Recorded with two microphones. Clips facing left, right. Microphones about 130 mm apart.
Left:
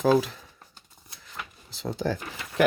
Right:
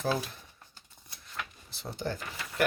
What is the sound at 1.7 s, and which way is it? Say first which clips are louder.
Speech: left 8 dB; 90° left.